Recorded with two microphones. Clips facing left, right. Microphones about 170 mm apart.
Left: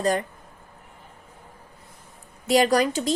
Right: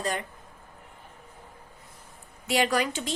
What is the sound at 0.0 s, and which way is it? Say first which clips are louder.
Speech: left 7 dB; 40° left (ahead or behind).